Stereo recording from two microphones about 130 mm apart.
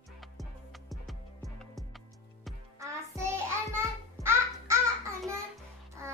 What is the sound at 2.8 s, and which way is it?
Music, 25° right (ahead or behind).